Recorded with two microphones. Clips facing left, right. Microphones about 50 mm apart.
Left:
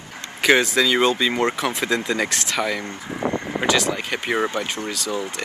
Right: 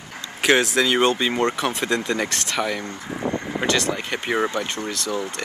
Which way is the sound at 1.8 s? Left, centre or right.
Left.